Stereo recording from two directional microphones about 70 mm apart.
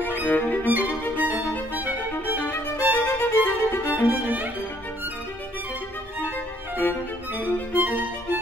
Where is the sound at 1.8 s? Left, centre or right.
Right.